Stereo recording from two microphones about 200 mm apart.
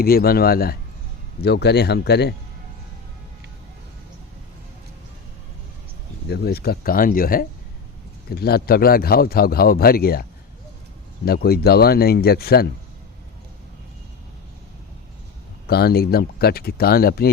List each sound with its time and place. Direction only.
0.0 s a man's voice: 50° left (ahead or behind)
6.2 s a man's voice: 55° left (ahead or behind)
11.3 s a man's voice: 50° left (ahead or behind)
15.6 s a man's voice: 50° left (ahead or behind)